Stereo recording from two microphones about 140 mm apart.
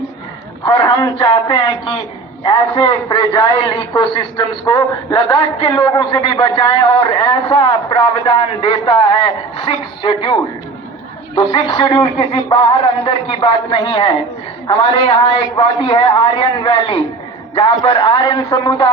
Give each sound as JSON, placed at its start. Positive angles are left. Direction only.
{"t": 0.6, "sound": "a man's voice", "side_deg": 40}
{"t": 11.7, "sound": "a man's voice", "side_deg": 35}